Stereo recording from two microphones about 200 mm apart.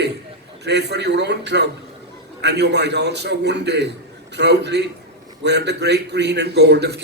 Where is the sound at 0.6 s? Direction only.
55° right (ahead or behind).